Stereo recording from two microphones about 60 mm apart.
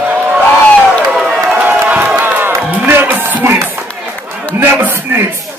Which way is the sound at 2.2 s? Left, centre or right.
Right.